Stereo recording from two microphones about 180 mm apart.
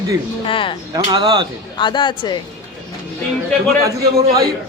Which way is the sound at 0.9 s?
25° right (ahead or behind).